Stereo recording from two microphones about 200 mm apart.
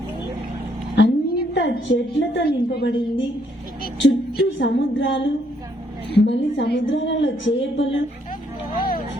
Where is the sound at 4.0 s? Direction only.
65° left (ahead or behind).